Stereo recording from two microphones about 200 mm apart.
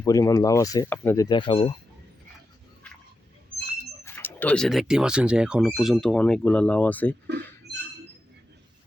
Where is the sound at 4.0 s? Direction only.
10° left (ahead or behind).